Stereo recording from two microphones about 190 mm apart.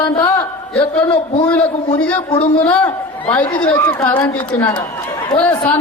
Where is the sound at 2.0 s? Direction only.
5° left (ahead or behind).